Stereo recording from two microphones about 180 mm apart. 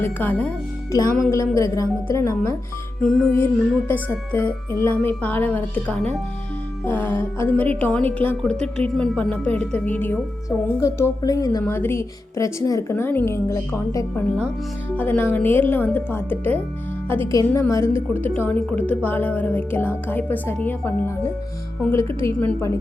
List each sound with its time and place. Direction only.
0.0 s a woman's voice: 10° left (ahead or behind)
3.0 s a woman's voice: 5° left (ahead or behind)